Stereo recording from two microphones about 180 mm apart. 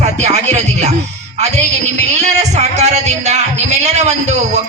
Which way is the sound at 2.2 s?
40° right (ahead or behind).